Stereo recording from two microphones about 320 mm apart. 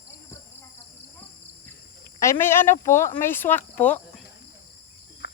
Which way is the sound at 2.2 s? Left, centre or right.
Centre.